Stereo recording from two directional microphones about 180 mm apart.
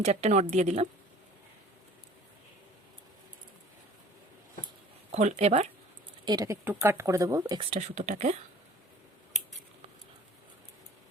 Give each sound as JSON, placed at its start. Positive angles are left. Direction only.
{"t": 0.0, "sound": "speech", "side_deg": -35}
{"t": 5.1, "sound": "speech", "side_deg": -35}
{"t": 6.2, "sound": "speech", "side_deg": -20}